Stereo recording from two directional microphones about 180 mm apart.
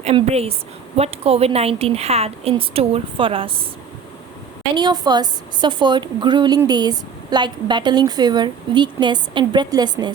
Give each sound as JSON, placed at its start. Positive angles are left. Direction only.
{"t": 0.0, "sound": "a woman's voice", "side_deg": -35}
{"t": 4.7, "sound": "speech", "side_deg": -25}